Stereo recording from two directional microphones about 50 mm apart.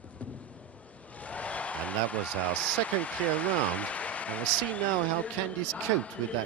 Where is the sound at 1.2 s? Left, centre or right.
Left.